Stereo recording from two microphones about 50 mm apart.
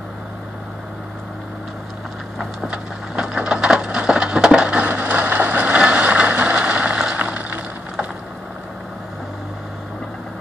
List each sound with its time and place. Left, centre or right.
2.7 s wood: right
4.8 s vehicle: right
7.2 s a sound: right